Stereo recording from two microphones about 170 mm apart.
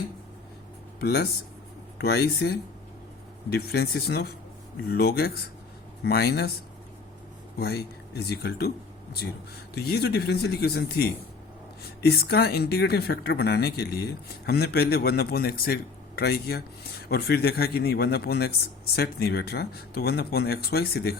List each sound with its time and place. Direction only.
0.9 s speech: 70° left (ahead or behind)
7.6 s speech: 70° left (ahead or behind)
9.7 s speech: 70° left (ahead or behind)